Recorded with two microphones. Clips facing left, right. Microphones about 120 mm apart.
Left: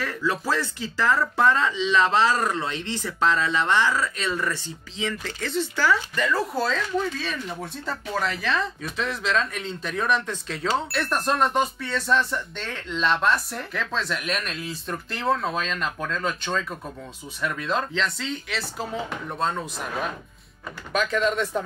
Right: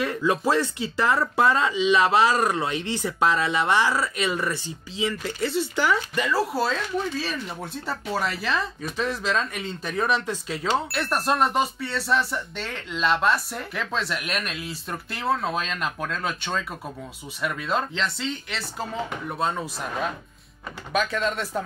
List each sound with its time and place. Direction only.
0.0 s speech: 15° right (ahead or behind)
20.9 s speech: 5° right (ahead or behind)